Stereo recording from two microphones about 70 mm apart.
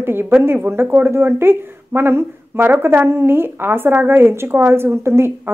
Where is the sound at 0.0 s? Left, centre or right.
Right.